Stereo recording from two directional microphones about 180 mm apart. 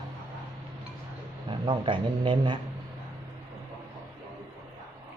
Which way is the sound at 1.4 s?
25° right (ahead or behind).